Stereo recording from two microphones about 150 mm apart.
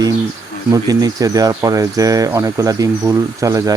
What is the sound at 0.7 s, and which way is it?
Speech, 25° right (ahead or behind).